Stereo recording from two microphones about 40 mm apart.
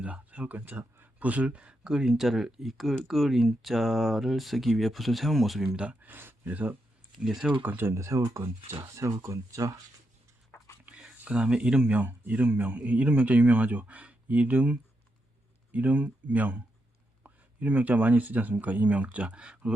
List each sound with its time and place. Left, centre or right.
0.0 s a man's voice: right
1.9 s speech: centre
5.7 s a man's voice: right
6.1 s speech: right
6.5 s a man's voice: right
7.2 s speech: centre
7.6 s speech: right
8.6 s speech: right
10.8 s a sound: right
11.3 s a man's voice: right